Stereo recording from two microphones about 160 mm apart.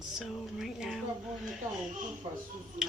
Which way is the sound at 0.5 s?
5° right (ahead or behind).